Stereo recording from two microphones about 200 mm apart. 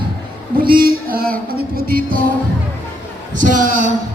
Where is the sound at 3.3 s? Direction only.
40° right (ahead or behind).